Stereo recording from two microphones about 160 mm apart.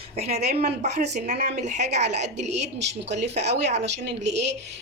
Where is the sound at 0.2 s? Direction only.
40° right (ahead or behind).